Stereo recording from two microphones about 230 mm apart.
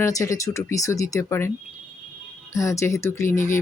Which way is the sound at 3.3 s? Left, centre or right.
Left.